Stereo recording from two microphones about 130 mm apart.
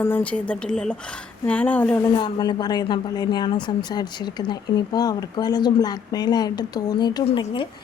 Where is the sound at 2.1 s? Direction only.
35° left (ahead or behind).